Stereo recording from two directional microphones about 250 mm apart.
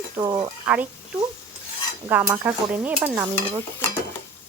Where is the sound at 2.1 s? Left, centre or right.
Centre.